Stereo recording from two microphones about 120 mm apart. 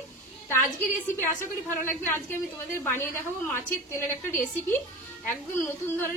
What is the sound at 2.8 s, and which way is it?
A woman's voice, 20° left (ahead or behind).